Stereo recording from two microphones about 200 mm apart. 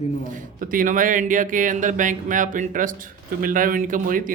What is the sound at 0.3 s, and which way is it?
Speech, 40° right (ahead or behind).